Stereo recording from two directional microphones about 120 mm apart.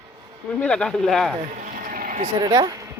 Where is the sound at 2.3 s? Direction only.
35° right (ahead or behind).